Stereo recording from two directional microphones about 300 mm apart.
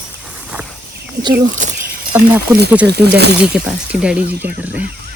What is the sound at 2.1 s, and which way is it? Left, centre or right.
Speech, centre.